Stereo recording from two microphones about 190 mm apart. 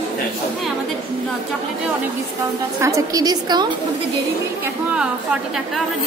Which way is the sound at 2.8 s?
15° right (ahead or behind).